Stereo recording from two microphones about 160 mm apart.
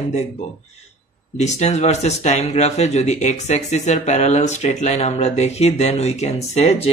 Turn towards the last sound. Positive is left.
turn(degrees=40)  # may be behind; listen again after turning